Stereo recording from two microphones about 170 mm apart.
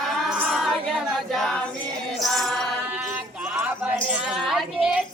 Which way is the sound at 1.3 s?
Centre (ahead or behind).